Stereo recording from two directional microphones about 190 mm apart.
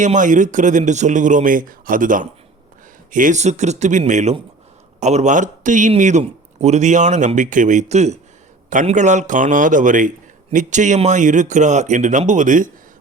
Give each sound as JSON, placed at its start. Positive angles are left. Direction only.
{"t": 0.0, "sound": "speech", "side_deg": -40}